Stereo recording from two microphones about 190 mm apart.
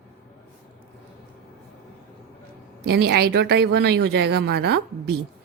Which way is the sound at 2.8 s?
55° right (ahead or behind).